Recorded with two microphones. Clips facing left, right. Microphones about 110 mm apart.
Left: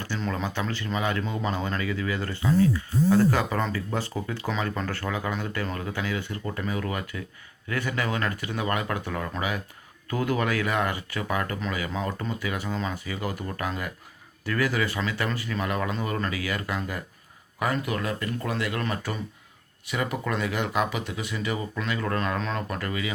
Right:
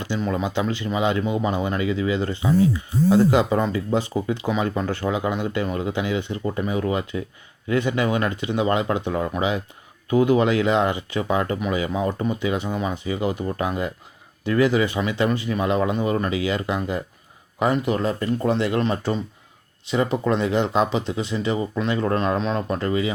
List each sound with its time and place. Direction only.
0.0 s speech: 15° right (ahead or behind)